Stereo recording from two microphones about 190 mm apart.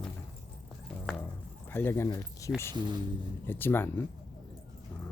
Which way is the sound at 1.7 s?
10° left (ahead or behind).